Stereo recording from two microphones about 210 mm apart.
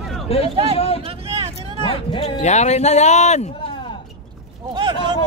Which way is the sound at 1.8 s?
25° left (ahead or behind).